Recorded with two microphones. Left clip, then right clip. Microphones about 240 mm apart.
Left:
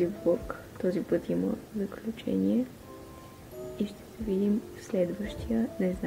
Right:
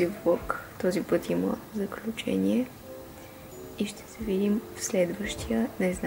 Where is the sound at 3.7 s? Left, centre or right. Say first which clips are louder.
Right 4 dB; centre.